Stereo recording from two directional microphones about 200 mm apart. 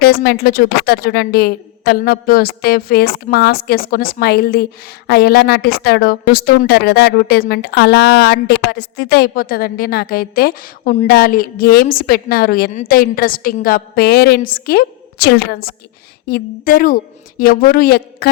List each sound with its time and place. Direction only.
0.0 s a woman's voice: 50° left (ahead or behind)